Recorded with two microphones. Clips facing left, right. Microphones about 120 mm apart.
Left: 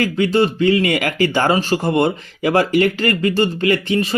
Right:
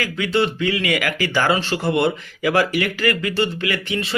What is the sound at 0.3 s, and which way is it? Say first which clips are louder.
Speech: left 4 dB; 45° left (ahead or behind).